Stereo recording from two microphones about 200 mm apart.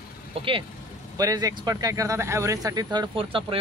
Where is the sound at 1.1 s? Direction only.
20° right (ahead or behind).